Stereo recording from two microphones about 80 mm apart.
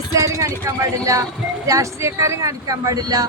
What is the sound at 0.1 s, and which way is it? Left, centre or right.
Speech, right.